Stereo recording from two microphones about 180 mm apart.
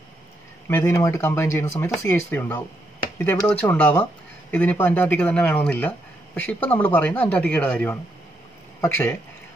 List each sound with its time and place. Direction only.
0.7 s speech: 15° left (ahead or behind)